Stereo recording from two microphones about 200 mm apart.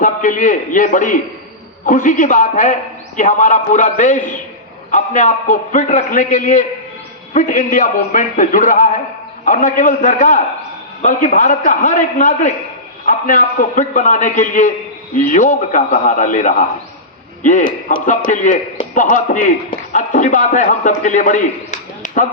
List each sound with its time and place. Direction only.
0.0 s a man's voice: 40° left (ahead or behind)